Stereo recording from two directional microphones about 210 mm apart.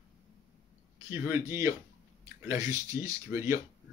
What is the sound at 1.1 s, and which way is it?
Speech, 10° right (ahead or behind).